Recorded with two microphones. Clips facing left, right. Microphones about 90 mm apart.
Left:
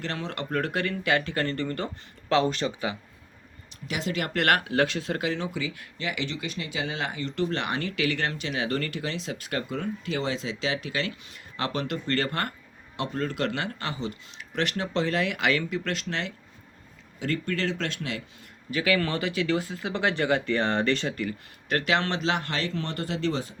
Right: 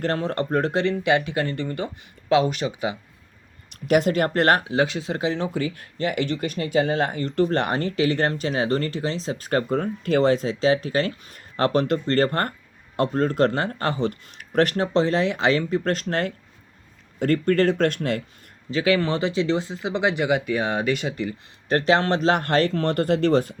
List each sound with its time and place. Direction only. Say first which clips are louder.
0.0 s speech: right 9 dB; 45° right (ahead or behind); by 3.0 s 15° right (ahead or behind)
3.7 s speech: right 12 dB; 55° right (ahead or behind); by 5.5 s 30° right (ahead or behind)
5.5 s speech: right 7 dB; 45° right (ahead or behind)
18.7 s speech: right 5 dB; 25° right (ahead or behind)
21.7 s speech: right 6 dB; 35° right (ahead or behind); by 23.6 s 55° right (ahead or behind)